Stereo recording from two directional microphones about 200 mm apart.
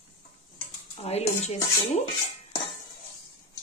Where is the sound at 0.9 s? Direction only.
30° left (ahead or behind).